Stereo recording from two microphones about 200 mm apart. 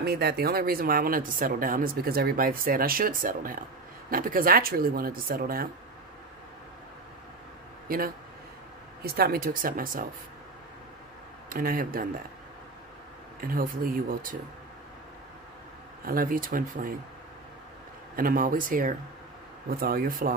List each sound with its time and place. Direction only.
0.0 s speech: 55° right (ahead or behind)
7.9 s speech: 45° right (ahead or behind)
11.4 s speech: 45° right (ahead or behind)
13.4 s speech: 45° right (ahead or behind)
16.1 s speech: 45° right (ahead or behind)
18.1 s speech: 45° right (ahead or behind)